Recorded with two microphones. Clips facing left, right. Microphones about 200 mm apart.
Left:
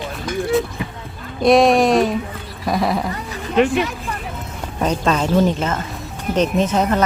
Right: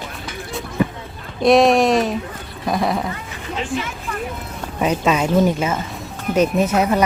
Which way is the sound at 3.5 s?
65° left (ahead or behind).